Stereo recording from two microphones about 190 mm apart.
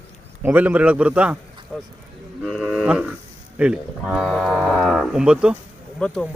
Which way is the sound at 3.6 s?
5° right (ahead or behind).